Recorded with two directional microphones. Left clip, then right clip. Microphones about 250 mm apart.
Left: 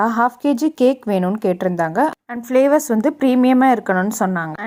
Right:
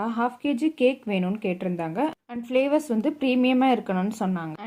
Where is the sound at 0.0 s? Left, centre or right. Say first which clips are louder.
Left 10 dB; left.